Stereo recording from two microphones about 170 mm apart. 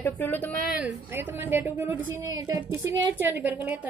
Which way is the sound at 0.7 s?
10° right (ahead or behind).